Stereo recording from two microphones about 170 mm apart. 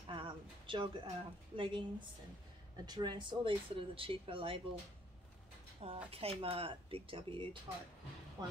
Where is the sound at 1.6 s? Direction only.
30° right (ahead or behind).